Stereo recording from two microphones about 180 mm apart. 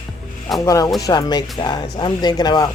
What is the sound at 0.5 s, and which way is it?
Speech, 20° left (ahead or behind).